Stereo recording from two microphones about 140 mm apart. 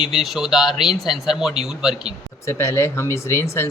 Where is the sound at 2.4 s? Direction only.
20° left (ahead or behind).